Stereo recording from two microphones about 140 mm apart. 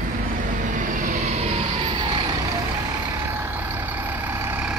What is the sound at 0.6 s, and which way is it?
Vehicle, 65° right (ahead or behind).